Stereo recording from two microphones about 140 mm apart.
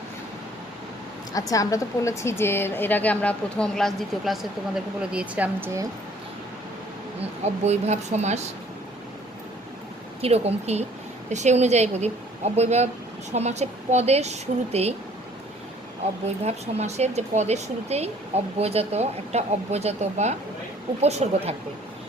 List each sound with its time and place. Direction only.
1.3 s a woman's voice: 25° left (ahead or behind); by 4.4 s centre (ahead or behind)
5.1 s speech: 10° right (ahead or behind)
7.2 s speech: 50° right (ahead or behind)
10.2 s speech: 45° right (ahead or behind)
16.2 s speech: 50° right (ahead or behind)